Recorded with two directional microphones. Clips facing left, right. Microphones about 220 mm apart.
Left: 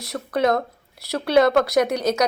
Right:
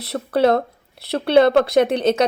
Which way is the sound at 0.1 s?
30° right (ahead or behind).